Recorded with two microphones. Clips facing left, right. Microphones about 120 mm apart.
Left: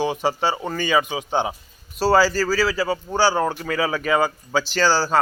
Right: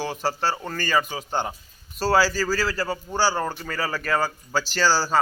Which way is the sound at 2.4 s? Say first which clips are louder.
Left 4 dB; 10° left (ahead or behind).